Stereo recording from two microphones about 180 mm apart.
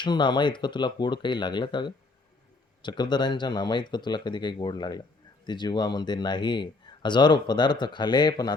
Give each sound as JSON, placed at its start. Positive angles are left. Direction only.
{"t": 0.0, "sound": "speech", "side_deg": 25}